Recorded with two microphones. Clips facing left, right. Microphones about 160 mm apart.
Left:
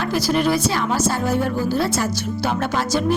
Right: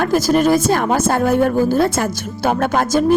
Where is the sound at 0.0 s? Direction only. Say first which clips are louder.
Right 5 dB; 45° right (ahead or behind).